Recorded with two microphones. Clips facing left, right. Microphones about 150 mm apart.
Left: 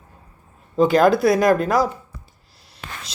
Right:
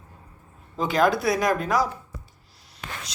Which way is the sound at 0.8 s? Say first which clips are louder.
Left 7 dB; 45° left (ahead or behind).